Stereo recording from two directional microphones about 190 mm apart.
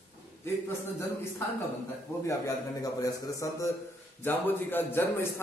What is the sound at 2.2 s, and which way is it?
A man's voice, 20° left (ahead or behind).